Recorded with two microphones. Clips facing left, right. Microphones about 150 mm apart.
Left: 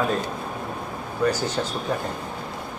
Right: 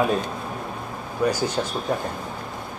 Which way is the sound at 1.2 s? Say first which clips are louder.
Even; 10° right (ahead or behind).